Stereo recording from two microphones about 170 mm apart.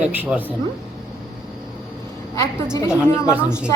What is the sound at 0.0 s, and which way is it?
Speech, 10° right (ahead or behind).